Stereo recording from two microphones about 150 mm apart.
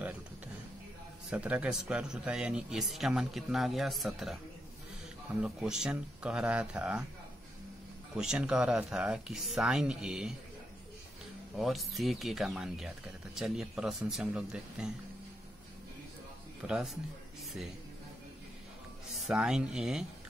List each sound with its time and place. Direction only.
1.3 s speech: 10° right (ahead or behind)
5.4 s speech: 5° right (ahead or behind)
8.2 s speech: 5° right (ahead or behind)
11.5 s speech: centre (ahead or behind)
16.6 s speech: 5° right (ahead or behind)
19.1 s speech: 5° right (ahead or behind)